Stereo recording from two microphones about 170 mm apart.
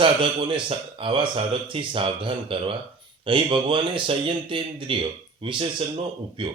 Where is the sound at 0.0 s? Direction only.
30° right (ahead or behind).